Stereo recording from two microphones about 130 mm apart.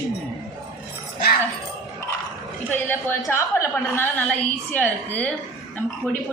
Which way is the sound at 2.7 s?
15° left (ahead or behind).